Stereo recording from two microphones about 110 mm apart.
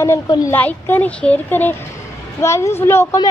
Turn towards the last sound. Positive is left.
turn(degrees=25)  # may be behind; listen again after turning